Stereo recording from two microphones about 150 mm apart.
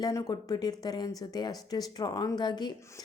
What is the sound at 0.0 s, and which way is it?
A woman's voice, 25° left (ahead or behind).